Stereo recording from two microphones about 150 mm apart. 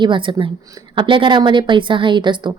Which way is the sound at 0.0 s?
35° right (ahead or behind).